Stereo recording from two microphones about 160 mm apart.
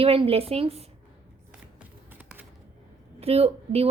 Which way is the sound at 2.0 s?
10° right (ahead or behind).